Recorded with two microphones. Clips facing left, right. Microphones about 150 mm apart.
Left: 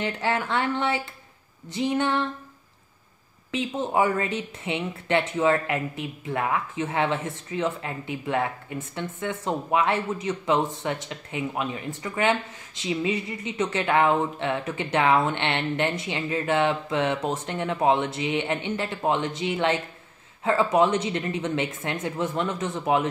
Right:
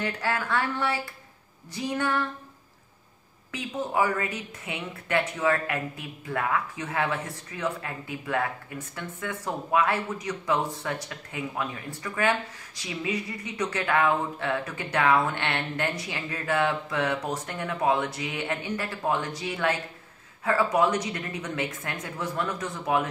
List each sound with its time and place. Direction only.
0.0 s a woman's voice: 20° left (ahead or behind)
3.5 s a woman's voice: 25° left (ahead or behind)